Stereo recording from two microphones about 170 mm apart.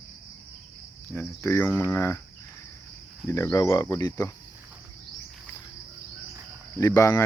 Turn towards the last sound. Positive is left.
turn(degrees=20)  # may be behind; listen again after turning